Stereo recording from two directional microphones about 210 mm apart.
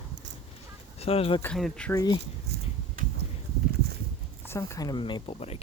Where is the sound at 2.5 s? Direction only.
40° right (ahead or behind).